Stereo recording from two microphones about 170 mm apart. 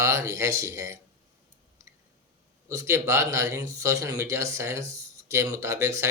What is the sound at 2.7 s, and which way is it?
Speech, 15° right (ahead or behind).